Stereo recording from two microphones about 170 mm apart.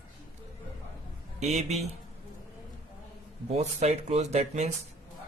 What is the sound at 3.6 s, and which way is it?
Speech, 40° right (ahead or behind).